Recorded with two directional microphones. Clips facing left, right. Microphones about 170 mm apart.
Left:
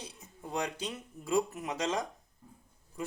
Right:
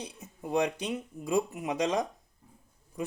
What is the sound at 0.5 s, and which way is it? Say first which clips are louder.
Speech: right 7 dB; 20° right (ahead or behind).